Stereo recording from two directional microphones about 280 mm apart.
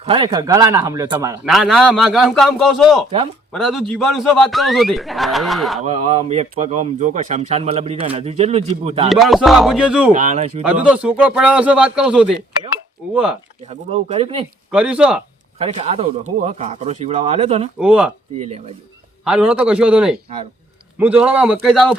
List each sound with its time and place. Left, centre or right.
0.0 s speech: centre
1.5 s a man's voice: centre
5.8 s speech: right
9.0 s a man's voice: centre
10.1 s speech: right
10.6 s a man's voice: centre
13.7 s speech: right
14.7 s a man's voice: centre
15.5 s speech: right
17.7 s a man's voice: centre
18.3 s speech: right
19.2 s a man's voice: centre